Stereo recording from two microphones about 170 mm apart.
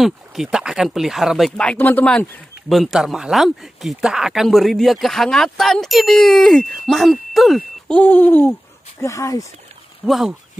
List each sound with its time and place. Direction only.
0.0 s speech: centre (ahead or behind); by 9.5 s 20° left (ahead or behind)
10.0 s speech: centre (ahead or behind)